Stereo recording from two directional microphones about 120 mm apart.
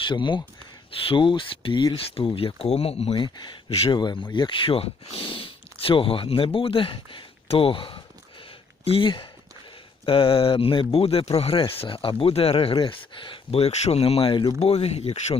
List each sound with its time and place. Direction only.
0.0 s speech: 40° left (ahead or behind)
2.1 s speech: 50° left (ahead or behind)
3.9 s speech: 40° left (ahead or behind)
14.6 s speech: 60° left (ahead or behind)